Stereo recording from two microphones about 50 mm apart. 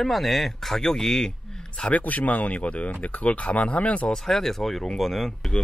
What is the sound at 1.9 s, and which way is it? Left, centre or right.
Speech, left.